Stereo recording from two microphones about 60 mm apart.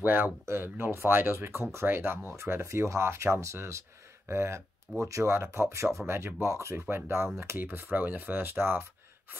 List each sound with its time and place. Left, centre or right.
0.0 s speech: right
6.7 s speech: right